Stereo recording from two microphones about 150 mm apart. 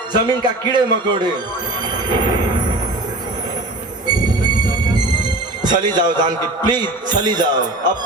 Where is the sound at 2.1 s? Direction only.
30° right (ahead or behind).